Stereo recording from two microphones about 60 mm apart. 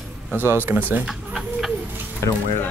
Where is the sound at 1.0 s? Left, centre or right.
Centre.